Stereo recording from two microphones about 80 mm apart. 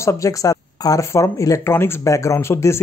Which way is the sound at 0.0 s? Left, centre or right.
Left.